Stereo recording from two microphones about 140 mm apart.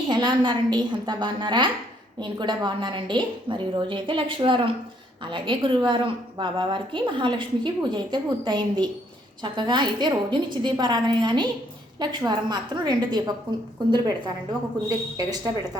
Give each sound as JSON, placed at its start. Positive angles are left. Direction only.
{"t": 0.1, "sound": "a woman's voice", "side_deg": -30}
{"t": 14.8, "sound": "speech", "side_deg": -25}